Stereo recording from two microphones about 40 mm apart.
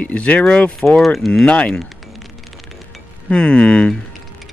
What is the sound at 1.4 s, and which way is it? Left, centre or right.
Speech, left.